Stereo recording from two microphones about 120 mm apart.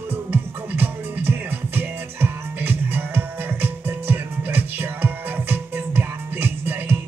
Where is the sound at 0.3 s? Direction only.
15° right (ahead or behind).